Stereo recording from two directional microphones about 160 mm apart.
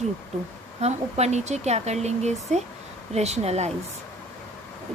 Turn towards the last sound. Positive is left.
turn(degrees=-40)  # may be behind; listen again after turning